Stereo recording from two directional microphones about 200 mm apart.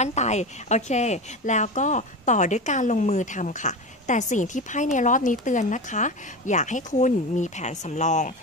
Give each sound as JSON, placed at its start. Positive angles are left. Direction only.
{"t": 0.0, "sound": "speech", "side_deg": 35}